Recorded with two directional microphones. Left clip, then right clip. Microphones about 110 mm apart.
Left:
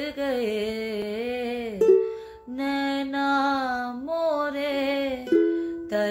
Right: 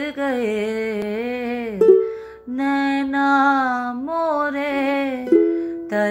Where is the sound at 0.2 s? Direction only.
30° left (ahead or behind).